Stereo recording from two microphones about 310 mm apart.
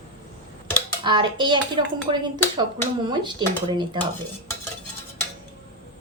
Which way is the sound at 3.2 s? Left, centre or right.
Centre.